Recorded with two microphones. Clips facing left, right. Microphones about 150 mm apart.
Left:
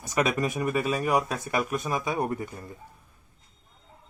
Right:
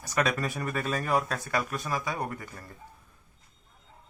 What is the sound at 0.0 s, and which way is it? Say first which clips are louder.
Speech: left 3 dB; 20° left (ahead or behind).